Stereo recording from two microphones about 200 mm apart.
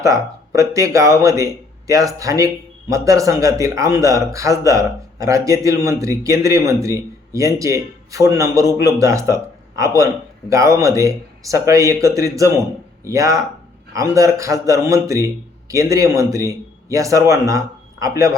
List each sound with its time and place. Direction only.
0.0 s speech: 15° right (ahead or behind)